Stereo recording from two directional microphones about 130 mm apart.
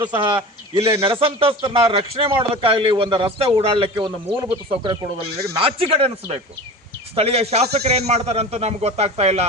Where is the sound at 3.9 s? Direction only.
30° right (ahead or behind).